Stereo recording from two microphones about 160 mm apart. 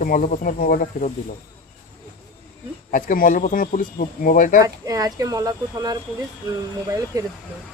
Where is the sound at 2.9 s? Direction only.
60° left (ahead or behind).